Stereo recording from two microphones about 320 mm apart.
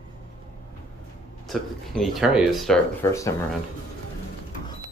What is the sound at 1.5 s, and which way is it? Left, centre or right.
Speech, centre.